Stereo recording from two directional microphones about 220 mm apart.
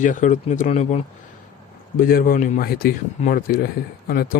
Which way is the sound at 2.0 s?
40° left (ahead or behind).